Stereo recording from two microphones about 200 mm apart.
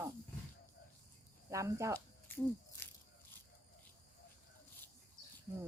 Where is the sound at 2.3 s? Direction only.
10° left (ahead or behind).